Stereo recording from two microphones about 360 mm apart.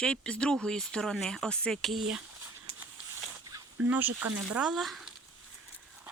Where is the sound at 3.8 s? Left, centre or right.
Centre.